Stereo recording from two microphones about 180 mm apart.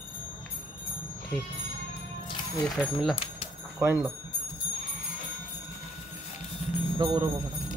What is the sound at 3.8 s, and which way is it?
Speech, 15° right (ahead or behind).